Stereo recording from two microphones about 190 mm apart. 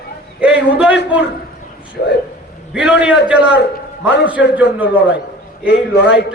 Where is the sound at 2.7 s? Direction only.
5° right (ahead or behind).